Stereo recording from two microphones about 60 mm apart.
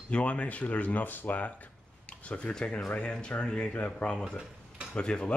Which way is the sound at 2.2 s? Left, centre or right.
Centre.